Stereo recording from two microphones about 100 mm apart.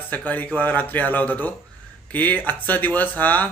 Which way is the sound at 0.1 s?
15° left (ahead or behind).